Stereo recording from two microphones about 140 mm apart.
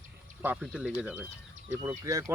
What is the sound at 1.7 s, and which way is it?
Speech, 20° right (ahead or behind).